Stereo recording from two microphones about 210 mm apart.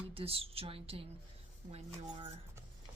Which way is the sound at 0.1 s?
25° right (ahead or behind).